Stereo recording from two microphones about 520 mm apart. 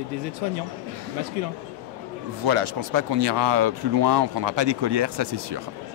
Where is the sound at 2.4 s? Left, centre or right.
Right.